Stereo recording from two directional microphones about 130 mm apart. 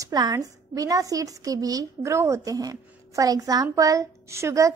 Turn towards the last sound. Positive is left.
turn(degrees=-20)  # may be behind; listen again after turning